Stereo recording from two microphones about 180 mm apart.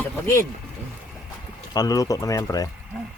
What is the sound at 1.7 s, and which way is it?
Speech, 20° left (ahead or behind).